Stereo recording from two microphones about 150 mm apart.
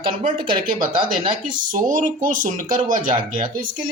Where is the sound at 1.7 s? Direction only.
60° right (ahead or behind).